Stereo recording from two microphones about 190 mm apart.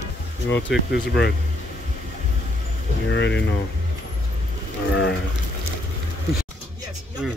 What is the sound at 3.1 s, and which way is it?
Speech, 65° left (ahead or behind).